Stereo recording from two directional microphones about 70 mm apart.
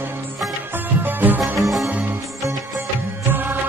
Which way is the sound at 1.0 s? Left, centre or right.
Right.